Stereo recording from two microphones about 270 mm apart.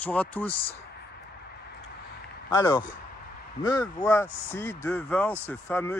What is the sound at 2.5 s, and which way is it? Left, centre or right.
Speech, centre.